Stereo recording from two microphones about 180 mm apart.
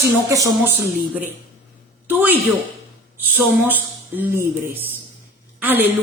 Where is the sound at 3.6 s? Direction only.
10° right (ahead or behind).